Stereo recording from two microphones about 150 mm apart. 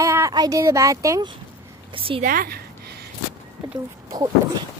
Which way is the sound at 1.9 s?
35° right (ahead or behind).